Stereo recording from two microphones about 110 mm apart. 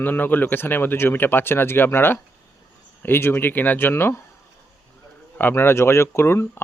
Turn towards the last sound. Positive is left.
turn(degrees=20)  # may be behind; listen again after turning